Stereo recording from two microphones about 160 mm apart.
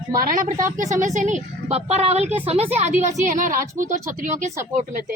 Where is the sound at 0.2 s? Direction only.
55° right (ahead or behind); by 2.2 s 40° right (ahead or behind).